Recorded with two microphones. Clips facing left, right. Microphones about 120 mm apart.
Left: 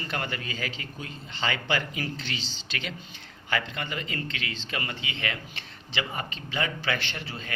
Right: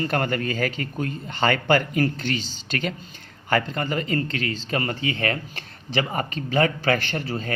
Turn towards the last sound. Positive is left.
turn(degrees=-40)  # may be behind; listen again after turning